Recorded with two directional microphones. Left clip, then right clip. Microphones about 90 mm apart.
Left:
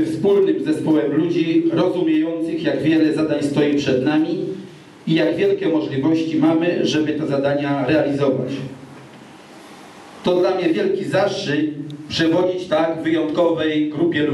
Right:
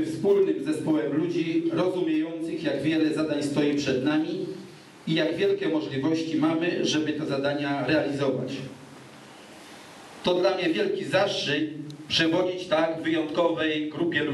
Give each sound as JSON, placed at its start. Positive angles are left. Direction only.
{"t": 0.2, "sound": "a man's voice", "side_deg": -5}
{"t": 10.2, "sound": "a man's voice", "side_deg": -25}